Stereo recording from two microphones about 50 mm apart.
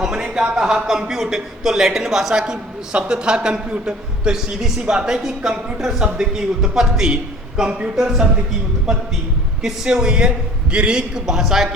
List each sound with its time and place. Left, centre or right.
0.0 s speech: centre
2.9 s a man's voice: centre
8.9 s a man's voice: centre